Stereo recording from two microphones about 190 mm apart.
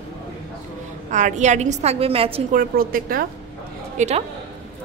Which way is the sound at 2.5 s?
50° right (ahead or behind).